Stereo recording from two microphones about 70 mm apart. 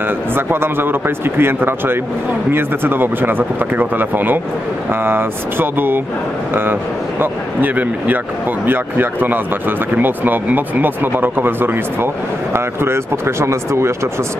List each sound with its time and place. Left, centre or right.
0.3 s speech: right